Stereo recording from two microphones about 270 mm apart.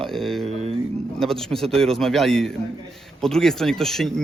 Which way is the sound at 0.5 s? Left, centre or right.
Right.